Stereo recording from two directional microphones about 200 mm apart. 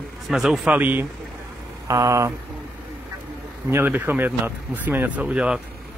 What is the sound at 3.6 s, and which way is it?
Speech, 10° right (ahead or behind).